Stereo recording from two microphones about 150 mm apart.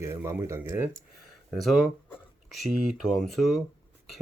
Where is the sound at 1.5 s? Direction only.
Centre (ahead or behind).